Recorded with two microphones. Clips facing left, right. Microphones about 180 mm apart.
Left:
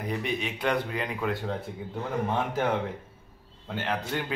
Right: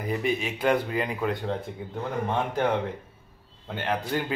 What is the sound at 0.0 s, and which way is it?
Speech, 5° right (ahead or behind).